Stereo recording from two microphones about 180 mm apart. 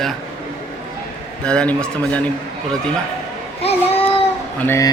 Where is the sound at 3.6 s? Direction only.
35° left (ahead or behind).